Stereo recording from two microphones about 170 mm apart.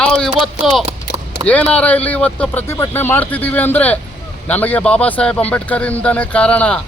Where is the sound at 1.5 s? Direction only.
10° left (ahead or behind).